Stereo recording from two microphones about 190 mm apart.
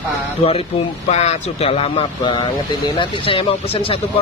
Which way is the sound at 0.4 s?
30° left (ahead or behind).